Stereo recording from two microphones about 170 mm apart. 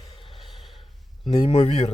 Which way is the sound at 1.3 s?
35° left (ahead or behind).